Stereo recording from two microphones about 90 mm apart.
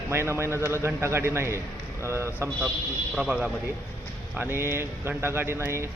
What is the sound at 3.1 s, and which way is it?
Speech, 5° right (ahead or behind).